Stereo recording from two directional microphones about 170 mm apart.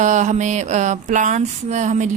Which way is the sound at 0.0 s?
45° right (ahead or behind).